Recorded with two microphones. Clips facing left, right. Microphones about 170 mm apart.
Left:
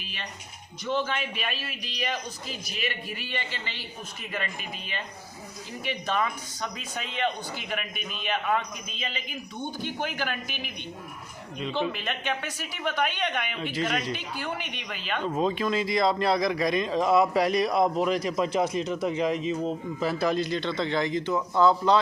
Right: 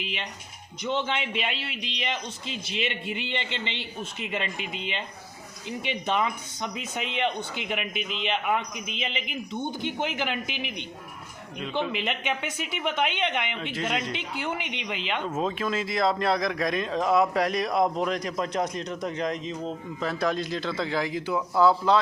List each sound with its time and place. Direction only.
0.0 s a man's voice: 20° right (ahead or behind)
11.9 s a man's voice: 15° right (ahead or behind)
15.3 s speech: centre (ahead or behind)